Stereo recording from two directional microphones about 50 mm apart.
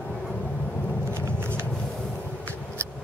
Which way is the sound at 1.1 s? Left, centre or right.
Right.